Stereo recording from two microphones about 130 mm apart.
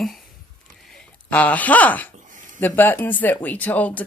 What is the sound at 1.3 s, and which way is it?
Speech, 10° left (ahead or behind).